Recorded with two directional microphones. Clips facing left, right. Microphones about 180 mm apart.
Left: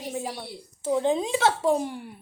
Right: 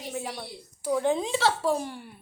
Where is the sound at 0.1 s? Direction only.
25° left (ahead or behind).